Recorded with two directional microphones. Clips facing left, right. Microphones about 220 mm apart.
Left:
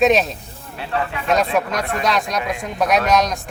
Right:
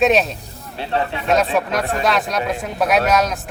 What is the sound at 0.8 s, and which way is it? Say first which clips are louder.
Speech: right 2 dB; 30° right (ahead or behind).